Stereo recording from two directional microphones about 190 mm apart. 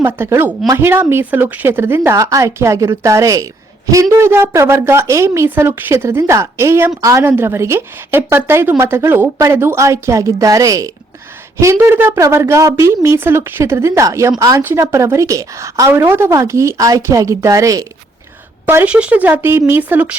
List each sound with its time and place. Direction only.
0.0 s a woman's voice: 10° right (ahead or behind)